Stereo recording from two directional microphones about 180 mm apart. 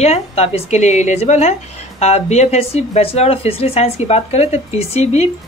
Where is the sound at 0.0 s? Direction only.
35° left (ahead or behind).